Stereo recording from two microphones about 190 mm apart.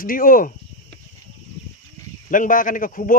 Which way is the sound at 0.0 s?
50° left (ahead or behind).